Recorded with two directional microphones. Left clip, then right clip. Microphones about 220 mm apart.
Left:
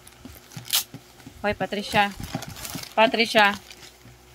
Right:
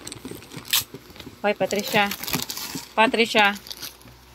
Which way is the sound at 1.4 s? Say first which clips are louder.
Right 4 dB; 15° left (ahead or behind).